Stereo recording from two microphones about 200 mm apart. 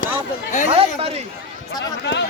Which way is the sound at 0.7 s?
30° right (ahead or behind).